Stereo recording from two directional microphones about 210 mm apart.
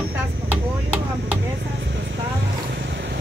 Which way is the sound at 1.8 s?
55° right (ahead or behind).